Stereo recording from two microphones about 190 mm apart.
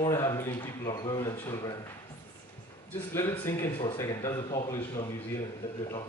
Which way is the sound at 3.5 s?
15° left (ahead or behind).